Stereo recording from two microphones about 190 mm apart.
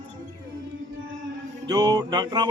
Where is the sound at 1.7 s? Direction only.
20° right (ahead or behind).